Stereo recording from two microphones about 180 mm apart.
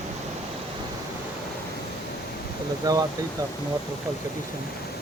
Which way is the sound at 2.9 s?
20° right (ahead or behind).